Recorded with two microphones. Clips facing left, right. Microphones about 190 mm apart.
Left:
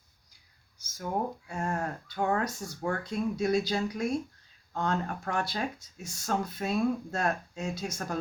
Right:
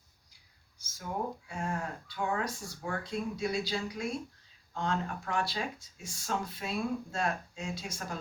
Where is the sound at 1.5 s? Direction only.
45° left (ahead or behind).